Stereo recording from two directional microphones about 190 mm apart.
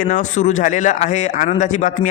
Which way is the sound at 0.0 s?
45° left (ahead or behind).